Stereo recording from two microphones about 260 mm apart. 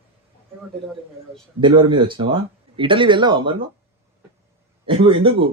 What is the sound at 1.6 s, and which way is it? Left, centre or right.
Speech, centre.